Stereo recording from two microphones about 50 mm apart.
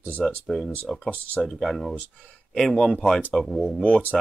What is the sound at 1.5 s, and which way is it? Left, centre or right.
Speech, centre.